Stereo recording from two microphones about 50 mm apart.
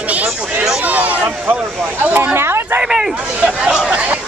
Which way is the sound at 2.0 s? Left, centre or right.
Right.